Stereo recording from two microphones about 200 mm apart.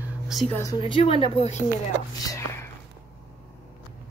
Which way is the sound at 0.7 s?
25° left (ahead or behind).